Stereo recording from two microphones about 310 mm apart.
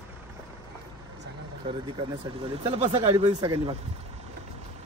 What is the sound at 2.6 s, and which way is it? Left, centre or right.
Speech, centre.